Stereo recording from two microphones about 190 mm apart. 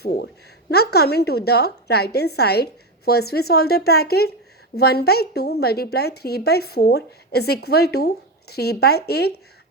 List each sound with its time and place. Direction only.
0.7 s a woman's voice: 55° left (ahead or behind)